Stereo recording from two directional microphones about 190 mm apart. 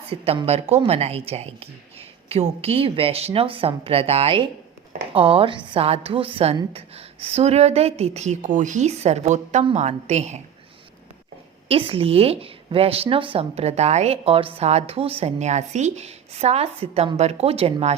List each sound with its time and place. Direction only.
0.1 s speech: 30° right (ahead or behind)
11.7 s speech: 30° right (ahead or behind)